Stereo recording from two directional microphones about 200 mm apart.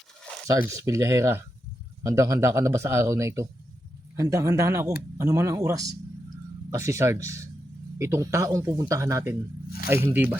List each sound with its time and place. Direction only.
0.4 s speech: 15° right (ahead or behind)